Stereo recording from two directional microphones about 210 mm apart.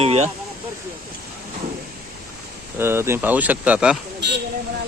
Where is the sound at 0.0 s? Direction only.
30° right (ahead or behind).